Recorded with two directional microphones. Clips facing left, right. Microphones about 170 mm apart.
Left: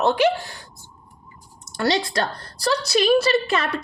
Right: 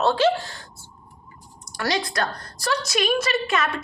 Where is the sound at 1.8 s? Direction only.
25° left (ahead or behind).